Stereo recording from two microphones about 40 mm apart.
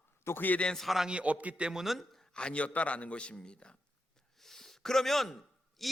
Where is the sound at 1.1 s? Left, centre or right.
Right.